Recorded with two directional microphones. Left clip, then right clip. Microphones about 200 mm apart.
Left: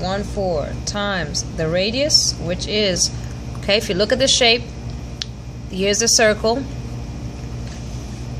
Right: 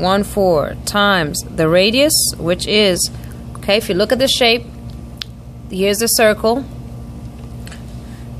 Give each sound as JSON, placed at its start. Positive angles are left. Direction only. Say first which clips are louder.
{"t": 0.0, "sound": "a woman's voice", "louder": "right 8 dB", "side_deg": -35}